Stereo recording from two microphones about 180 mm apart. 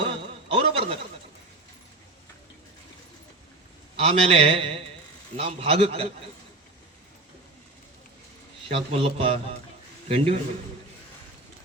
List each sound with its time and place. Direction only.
0.0 s a sound: 30° right (ahead or behind)
3.9 s a man's voice: 30° right (ahead or behind)
8.7 s a man's voice: 30° right (ahead or behind)